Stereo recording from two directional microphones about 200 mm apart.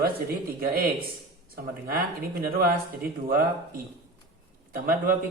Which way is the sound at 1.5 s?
45° right (ahead or behind).